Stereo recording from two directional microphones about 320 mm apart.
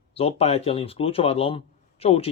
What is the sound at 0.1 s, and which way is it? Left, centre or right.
Speech, centre.